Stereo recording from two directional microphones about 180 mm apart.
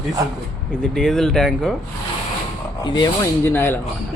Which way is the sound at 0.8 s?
5° left (ahead or behind).